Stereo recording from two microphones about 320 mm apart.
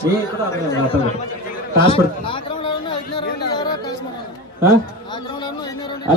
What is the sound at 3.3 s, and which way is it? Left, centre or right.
Music, left.